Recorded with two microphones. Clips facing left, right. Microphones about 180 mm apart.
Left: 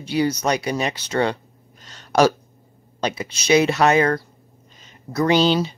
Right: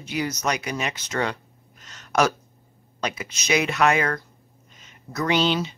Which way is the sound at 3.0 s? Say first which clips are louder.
Left 6 dB; 30° left (ahead or behind).